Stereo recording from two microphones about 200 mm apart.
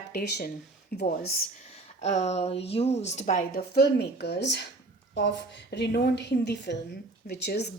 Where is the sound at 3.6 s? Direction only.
55° left (ahead or behind).